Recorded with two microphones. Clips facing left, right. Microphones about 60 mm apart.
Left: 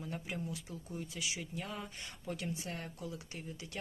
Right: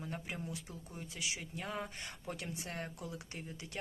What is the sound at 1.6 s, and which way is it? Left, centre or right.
A woman's voice, right.